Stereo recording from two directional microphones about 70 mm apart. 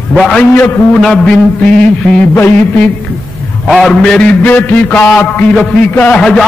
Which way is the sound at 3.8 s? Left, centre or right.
Centre.